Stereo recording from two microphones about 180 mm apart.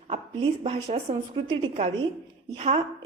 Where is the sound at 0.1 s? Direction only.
35° right (ahead or behind).